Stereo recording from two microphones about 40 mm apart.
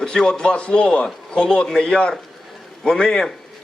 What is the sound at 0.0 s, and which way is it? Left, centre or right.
A man's voice, centre.